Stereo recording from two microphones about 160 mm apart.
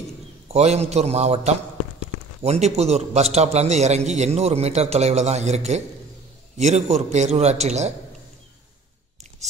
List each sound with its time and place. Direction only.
0.5 s a man's voice: 40° right (ahead or behind)